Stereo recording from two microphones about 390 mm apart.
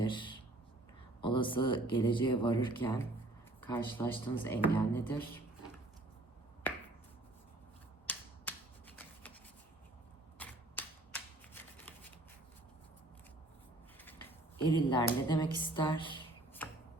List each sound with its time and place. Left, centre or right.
0.0 s a sound: centre
1.2 s speech: centre
6.6 s finger snapping: centre
8.0 s shuffling cards: centre
10.3 s typewriter: centre
14.0 s a sound: centre